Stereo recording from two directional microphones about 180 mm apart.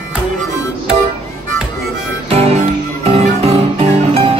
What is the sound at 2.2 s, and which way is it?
Music, 35° right (ahead or behind).